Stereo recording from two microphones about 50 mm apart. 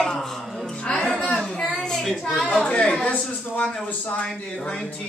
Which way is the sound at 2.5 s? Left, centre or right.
Left.